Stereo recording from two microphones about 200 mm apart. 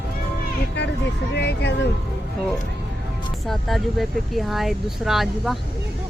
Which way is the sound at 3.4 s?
Centre (ahead or behind).